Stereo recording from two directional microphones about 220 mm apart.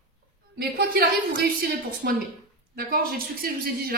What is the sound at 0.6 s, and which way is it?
A woman's voice, 45° right (ahead or behind).